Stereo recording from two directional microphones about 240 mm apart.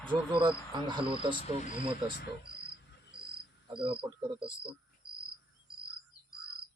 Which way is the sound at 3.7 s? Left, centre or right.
Right.